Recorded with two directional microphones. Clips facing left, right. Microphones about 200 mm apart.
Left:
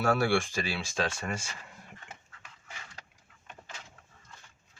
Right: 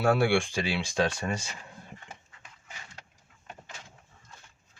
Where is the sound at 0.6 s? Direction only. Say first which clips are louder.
Right 4 dB; 20° right (ahead or behind).